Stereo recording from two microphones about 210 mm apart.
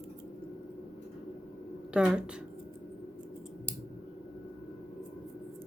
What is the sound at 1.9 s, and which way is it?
Speech, 5° right (ahead or behind).